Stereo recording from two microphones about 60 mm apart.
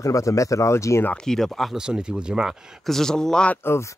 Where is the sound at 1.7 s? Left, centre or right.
Centre.